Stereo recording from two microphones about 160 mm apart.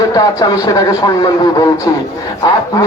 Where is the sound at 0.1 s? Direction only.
25° left (ahead or behind).